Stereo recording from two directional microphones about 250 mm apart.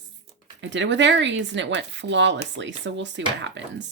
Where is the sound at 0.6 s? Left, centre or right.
Right.